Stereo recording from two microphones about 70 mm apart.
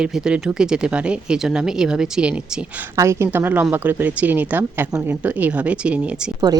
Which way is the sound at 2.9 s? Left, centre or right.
Right.